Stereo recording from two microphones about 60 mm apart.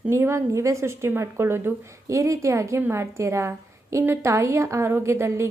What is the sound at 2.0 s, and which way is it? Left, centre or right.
A woman's voice, right.